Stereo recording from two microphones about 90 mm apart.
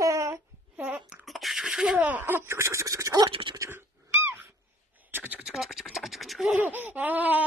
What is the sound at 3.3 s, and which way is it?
Speech, 70° right (ahead or behind).